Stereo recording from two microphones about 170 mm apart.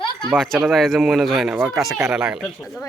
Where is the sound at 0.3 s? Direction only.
Centre (ahead or behind).